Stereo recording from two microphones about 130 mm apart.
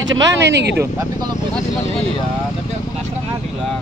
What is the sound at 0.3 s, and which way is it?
Speech, 20° right (ahead or behind).